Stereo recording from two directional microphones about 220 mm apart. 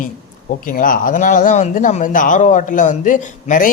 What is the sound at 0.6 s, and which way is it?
Speech, 40° left (ahead or behind).